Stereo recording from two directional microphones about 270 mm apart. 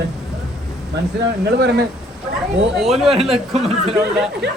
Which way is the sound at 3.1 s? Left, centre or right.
Right.